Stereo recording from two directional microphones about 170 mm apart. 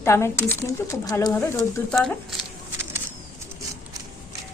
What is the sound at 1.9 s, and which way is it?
Speech, 5° left (ahead or behind).